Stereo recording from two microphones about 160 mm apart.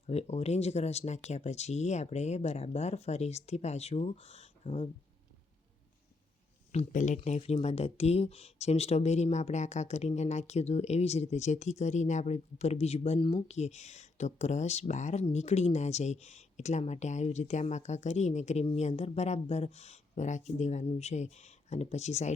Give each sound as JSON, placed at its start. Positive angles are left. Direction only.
{"t": 0.1, "sound": "speech", "side_deg": 40}
{"t": 6.7, "sound": "speech", "side_deg": 50}